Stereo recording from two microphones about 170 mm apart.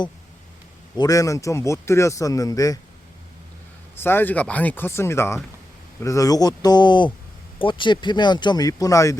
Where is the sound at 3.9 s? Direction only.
15° left (ahead or behind).